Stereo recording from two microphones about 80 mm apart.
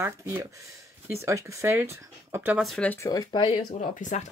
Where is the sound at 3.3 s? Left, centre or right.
Left.